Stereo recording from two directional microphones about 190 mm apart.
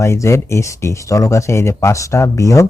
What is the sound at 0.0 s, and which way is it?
A man's voice, 15° left (ahead or behind).